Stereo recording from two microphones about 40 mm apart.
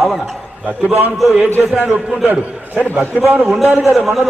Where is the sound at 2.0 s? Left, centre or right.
Centre.